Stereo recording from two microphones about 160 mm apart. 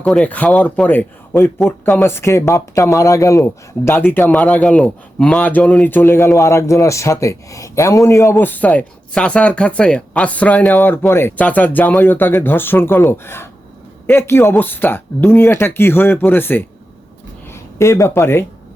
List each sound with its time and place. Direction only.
0.0 s speech: 5° left (ahead or behind)